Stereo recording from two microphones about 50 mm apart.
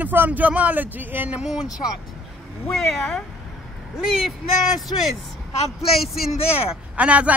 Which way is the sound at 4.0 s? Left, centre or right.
Centre.